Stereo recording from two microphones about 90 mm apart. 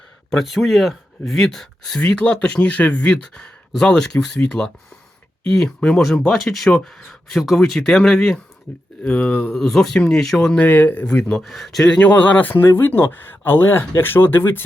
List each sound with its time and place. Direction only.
0.3 s speech: centre (ahead or behind)
11.9 s speech: 15° left (ahead or behind)